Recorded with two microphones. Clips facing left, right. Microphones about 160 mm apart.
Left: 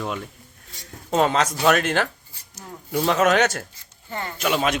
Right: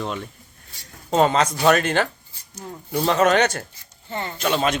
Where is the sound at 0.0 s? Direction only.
5° left (ahead or behind).